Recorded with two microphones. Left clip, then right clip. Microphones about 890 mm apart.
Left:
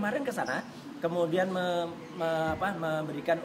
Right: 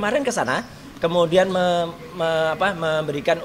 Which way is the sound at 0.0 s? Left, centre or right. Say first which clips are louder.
Right 10 dB; right.